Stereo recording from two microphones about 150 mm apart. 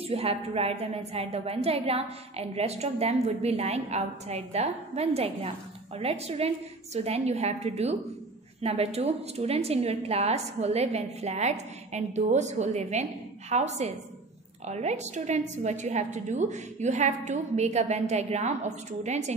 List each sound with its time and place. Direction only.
0.0 s a woman's voice: 40° right (ahead or behind)